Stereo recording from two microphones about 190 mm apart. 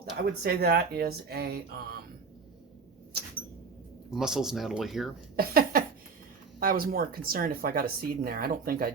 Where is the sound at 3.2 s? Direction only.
55° right (ahead or behind).